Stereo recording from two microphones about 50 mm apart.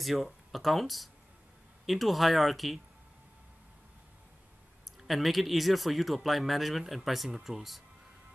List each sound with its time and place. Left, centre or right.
0.0 s speech: centre
5.0 s speech: centre